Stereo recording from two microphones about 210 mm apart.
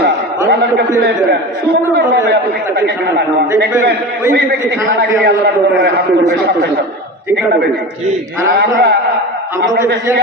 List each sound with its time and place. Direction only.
2.3 s speech: 50° right (ahead or behind)
5.2 s speech: 50° right (ahead or behind)
8.5 s speech: 50° right (ahead or behind)